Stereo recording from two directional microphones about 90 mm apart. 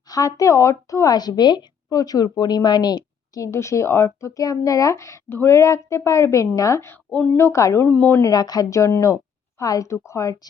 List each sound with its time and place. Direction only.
0.1 s speech: 40° left (ahead or behind)
3.5 s speech: 35° left (ahead or behind)
7.1 s a woman's voice: 15° left (ahead or behind)
7.3 s speech: 30° left (ahead or behind)
8.2 s speech: 45° left (ahead or behind)